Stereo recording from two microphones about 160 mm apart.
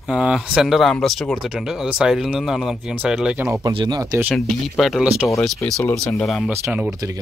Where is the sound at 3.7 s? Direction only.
30° right (ahead or behind).